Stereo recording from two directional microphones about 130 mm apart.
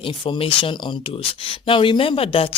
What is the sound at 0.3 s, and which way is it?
Speech, 45° left (ahead or behind).